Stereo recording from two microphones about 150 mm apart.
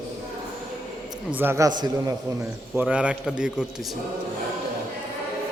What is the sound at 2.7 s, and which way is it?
Speech, 10° right (ahead or behind).